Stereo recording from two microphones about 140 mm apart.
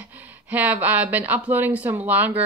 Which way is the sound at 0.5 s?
10° right (ahead or behind).